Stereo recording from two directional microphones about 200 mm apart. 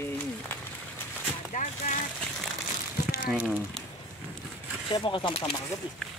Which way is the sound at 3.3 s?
Centre (ahead or behind).